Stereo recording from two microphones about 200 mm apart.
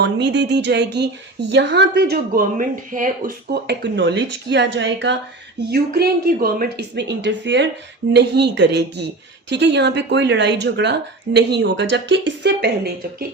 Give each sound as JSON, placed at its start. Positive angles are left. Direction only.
{"t": 0.0, "sound": "a woman's voice", "side_deg": -60}
{"t": 5.5, "sound": "a woman's voice", "side_deg": -50}